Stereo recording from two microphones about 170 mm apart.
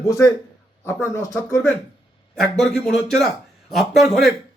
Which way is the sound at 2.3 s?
5° left (ahead or behind).